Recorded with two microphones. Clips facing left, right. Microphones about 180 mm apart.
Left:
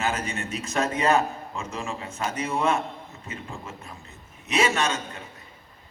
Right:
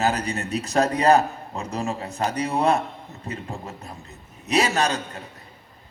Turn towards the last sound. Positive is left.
turn(degrees=-35)  # may be behind; listen again after turning